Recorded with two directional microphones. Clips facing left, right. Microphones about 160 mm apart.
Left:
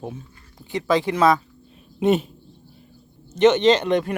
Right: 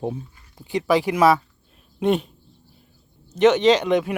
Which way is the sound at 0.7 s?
15° right (ahead or behind).